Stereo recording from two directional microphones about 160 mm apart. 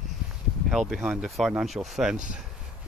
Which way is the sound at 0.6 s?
Centre (ahead or behind).